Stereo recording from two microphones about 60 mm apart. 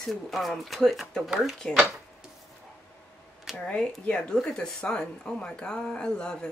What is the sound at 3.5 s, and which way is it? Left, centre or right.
Speech, centre.